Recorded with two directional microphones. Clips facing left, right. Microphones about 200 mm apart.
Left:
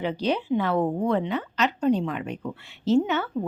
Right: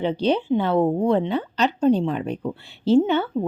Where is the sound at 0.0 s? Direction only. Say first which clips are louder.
Right 5 dB; 30° right (ahead or behind).